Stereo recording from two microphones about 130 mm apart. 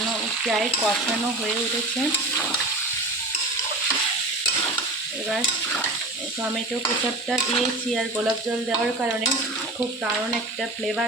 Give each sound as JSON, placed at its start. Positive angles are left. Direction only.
{"t": 0.4, "sound": "stir", "side_deg": 0}
{"t": 7.3, "sound": "stir", "side_deg": 0}